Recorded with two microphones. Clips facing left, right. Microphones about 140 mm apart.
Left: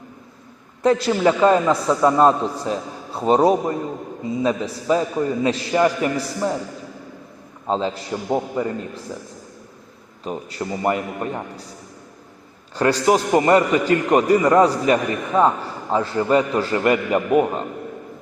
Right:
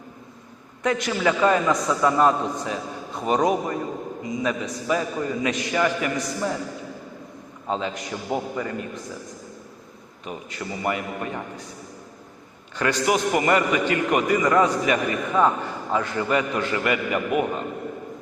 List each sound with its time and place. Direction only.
0.8 s a man's voice: 35° left (ahead or behind)
7.7 s a man's voice: 30° left (ahead or behind)
10.2 s a man's voice: 35° left (ahead or behind)
12.7 s a man's voice: 35° left (ahead or behind)